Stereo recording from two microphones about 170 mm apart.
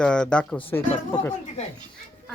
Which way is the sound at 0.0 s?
5° left (ahead or behind).